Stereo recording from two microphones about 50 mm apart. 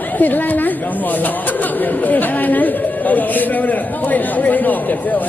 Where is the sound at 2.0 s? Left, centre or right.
Left.